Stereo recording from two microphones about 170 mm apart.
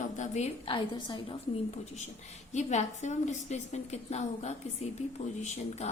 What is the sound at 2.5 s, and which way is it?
A woman's voice, 45° left (ahead or behind).